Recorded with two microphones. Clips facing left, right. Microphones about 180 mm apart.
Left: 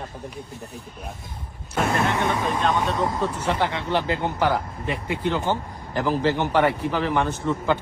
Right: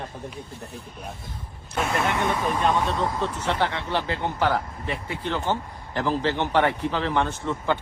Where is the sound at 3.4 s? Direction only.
15° left (ahead or behind).